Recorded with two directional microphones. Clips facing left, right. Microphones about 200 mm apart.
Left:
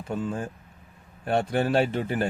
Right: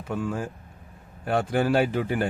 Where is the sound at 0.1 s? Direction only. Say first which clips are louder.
Right 1 dB; 25° left (ahead or behind).